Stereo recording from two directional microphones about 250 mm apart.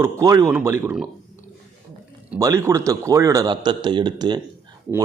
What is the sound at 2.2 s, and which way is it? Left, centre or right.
A man's voice, centre.